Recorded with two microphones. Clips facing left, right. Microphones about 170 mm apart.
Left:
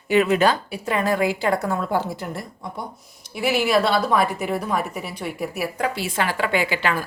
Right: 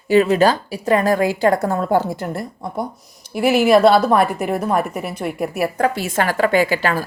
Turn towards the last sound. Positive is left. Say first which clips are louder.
# right 5 dB
turn(degrees=-40)  # may be behind; listen again after turning